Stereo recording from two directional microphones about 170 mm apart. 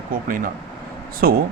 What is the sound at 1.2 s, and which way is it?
Speech, 65° right (ahead or behind).